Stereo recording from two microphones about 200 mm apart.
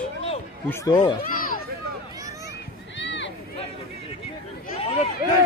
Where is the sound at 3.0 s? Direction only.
65° left (ahead or behind).